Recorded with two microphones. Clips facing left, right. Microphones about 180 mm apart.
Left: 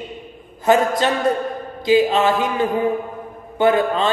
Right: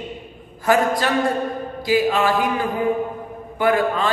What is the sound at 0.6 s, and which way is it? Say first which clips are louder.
A man's voice: left 2 dB; 25° left (ahead or behind).